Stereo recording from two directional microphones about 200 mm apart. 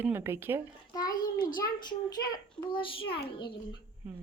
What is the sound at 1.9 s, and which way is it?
A child's voice, 20° left (ahead or behind).